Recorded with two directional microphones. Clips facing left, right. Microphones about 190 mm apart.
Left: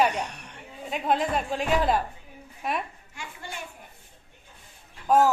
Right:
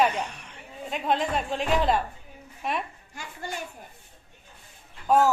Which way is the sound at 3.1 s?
40° right (ahead or behind).